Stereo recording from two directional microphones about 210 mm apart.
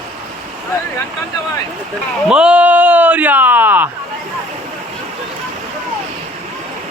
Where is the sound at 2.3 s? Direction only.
5° right (ahead or behind).